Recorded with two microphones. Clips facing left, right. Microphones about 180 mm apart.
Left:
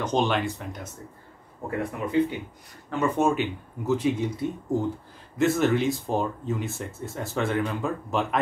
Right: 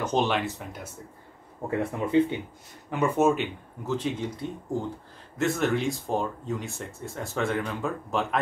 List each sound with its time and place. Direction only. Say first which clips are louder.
0.0 s speech: left 1 dB; 5° right (ahead or behind)
1.8 s speech: right 1 dB; 30° right (ahead or behind)
2.9 s speech: right 1 dB; 10° right (ahead or behind)
3.8 s speech: left 5 dB; 10° left (ahead or behind)